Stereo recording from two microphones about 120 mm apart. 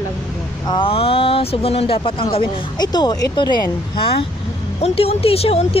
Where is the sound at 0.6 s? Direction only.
45° left (ahead or behind).